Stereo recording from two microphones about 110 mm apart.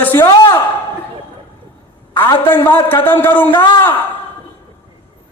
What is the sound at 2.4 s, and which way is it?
A man's voice, 20° left (ahead or behind).